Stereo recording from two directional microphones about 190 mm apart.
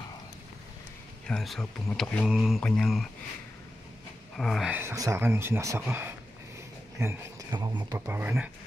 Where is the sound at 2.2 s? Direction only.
5° right (ahead or behind).